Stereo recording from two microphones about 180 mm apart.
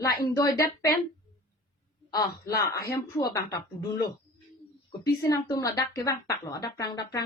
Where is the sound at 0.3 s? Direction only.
20° left (ahead or behind).